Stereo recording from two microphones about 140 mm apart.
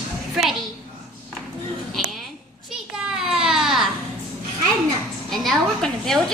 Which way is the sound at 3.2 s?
5° right (ahead or behind).